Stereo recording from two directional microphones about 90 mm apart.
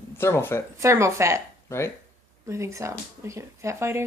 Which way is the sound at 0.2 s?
30° left (ahead or behind).